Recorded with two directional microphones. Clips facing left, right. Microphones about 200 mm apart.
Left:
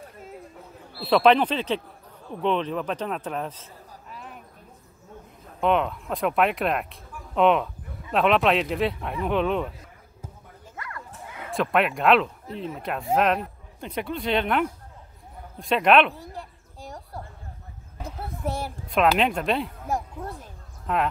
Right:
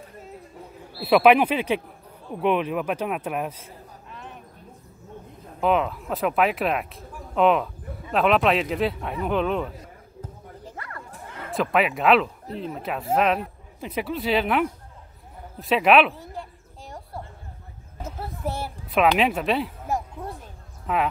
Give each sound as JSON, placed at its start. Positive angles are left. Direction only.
{"t": 1.0, "sound": "speech", "side_deg": -10}
{"t": 4.1, "sound": "a sound", "side_deg": 0}
{"t": 5.6, "sound": "speech", "side_deg": 0}
{"t": 10.6, "sound": "bow-wow", "side_deg": -30}
{"t": 11.5, "sound": "speech", "side_deg": 0}
{"t": 15.6, "sound": "a sound", "side_deg": -5}
{"t": 20.8, "sound": "speech", "side_deg": -5}